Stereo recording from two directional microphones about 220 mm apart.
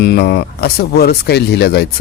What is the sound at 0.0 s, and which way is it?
Speech, 45° left (ahead or behind).